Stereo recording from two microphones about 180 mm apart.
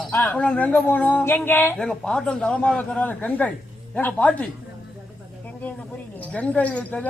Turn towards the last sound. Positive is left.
turn(degrees=5)  # may be behind; listen again after turning